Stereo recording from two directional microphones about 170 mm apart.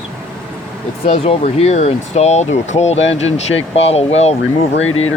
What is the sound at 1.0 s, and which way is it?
Speech, 35° left (ahead or behind).